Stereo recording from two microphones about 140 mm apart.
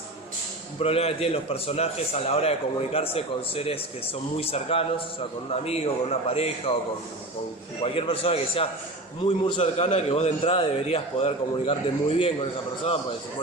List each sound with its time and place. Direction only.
0.8 s a man's voice: 45° left (ahead or behind)
7.8 s a man's voice: 40° left (ahead or behind)